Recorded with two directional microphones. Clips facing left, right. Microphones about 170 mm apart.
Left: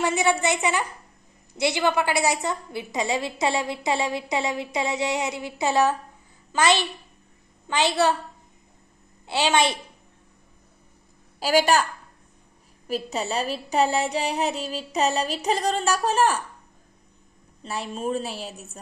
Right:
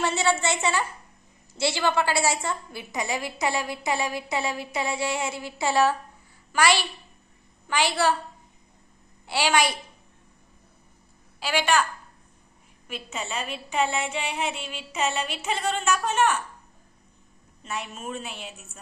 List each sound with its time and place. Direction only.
0.0 s a woman's voice: 15° left (ahead or behind)
9.2 s a woman's voice: 20° left (ahead or behind)
11.3 s a woman's voice: 40° left (ahead or behind)
17.6 s a woman's voice: 35° left (ahead or behind)